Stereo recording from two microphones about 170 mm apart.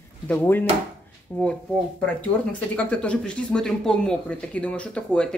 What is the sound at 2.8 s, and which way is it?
Speech, 5° left (ahead or behind).